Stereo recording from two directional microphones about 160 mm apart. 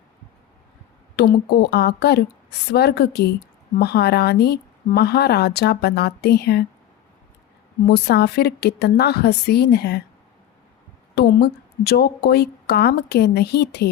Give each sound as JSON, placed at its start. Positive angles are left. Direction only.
{"t": 1.1, "sound": "speech", "side_deg": 90}
{"t": 7.9, "sound": "speech", "side_deg": 90}
{"t": 11.1, "sound": "speech", "side_deg": 90}